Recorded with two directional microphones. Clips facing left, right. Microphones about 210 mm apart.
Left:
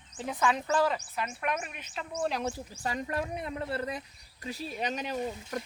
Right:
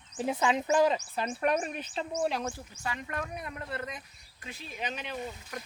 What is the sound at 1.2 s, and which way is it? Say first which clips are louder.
Speech: right 5 dB; 35° right (ahead or behind).